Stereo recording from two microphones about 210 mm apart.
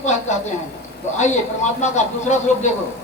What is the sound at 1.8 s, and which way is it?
Speech, 35° left (ahead or behind).